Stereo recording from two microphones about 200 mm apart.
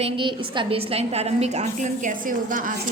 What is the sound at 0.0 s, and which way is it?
A woman's voice, 25° right (ahead or behind).